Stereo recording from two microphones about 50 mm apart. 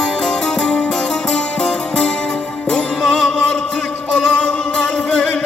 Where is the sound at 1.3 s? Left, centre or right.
Centre.